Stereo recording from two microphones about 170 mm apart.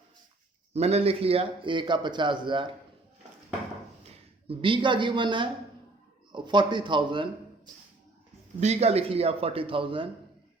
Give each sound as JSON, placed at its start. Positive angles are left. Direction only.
{"t": 0.7, "sound": "speech", "side_deg": -40}
{"t": 4.0, "sound": "speech", "side_deg": -30}
{"t": 8.6, "sound": "speech", "side_deg": -40}